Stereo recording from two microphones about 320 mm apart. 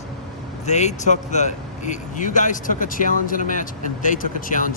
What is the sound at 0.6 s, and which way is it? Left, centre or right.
Speech, left.